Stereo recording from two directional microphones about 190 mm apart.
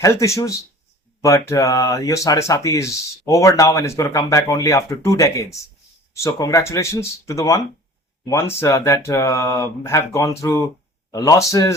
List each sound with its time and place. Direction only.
0.0 s speech: 15° left (ahead or behind)